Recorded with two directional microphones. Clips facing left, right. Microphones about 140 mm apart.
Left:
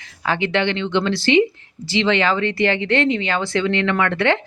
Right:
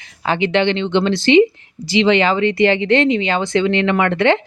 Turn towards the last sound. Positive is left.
turn(degrees=-20)  # may be behind; listen again after turning